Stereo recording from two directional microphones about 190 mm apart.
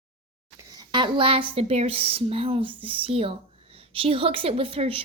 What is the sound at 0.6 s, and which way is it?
Speech, 20° right (ahead or behind).